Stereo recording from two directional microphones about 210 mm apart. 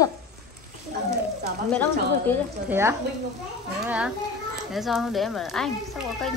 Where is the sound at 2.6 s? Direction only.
10° right (ahead or behind).